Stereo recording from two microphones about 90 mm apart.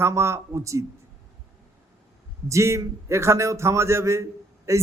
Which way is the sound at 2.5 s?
35° right (ahead or behind).